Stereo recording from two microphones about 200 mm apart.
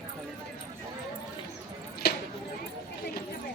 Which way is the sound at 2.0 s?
55° left (ahead or behind).